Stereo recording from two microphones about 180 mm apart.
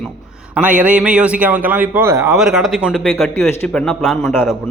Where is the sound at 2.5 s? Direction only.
Centre (ahead or behind).